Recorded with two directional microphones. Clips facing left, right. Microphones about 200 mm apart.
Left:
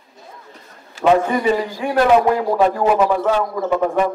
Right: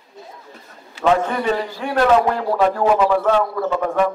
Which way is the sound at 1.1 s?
10° left (ahead or behind).